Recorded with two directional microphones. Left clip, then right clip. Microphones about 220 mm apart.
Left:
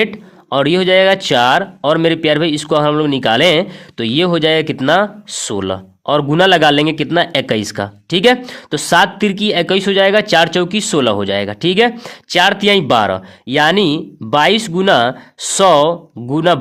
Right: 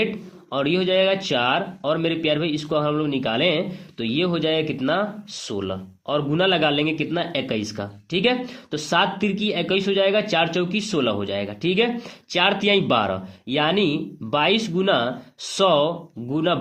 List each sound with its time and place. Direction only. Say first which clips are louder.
0.5 s speech: left 9 dB; 45° left (ahead or behind)